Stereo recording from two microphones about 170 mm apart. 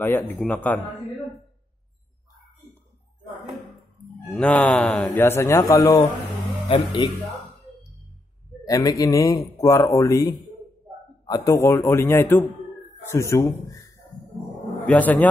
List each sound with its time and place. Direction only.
0.0 s speech: 15° left (ahead or behind)
4.4 s speech: 5° left (ahead or behind)
6.7 s speech: 30° left (ahead or behind)
8.6 s a man's voice: 20° left (ahead or behind)